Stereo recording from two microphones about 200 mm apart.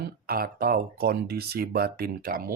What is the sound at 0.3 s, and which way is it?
Speech, 45° right (ahead or behind).